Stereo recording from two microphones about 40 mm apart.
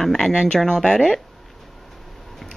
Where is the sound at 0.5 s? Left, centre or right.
Centre.